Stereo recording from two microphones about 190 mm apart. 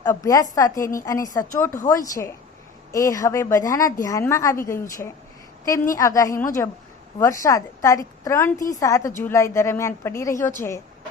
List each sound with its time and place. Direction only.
0.0 s a woman's voice: 15° left (ahead or behind)
5.9 s a woman's voice: 15° left (ahead or behind)